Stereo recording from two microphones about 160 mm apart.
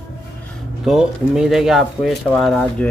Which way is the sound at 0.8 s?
5° right (ahead or behind).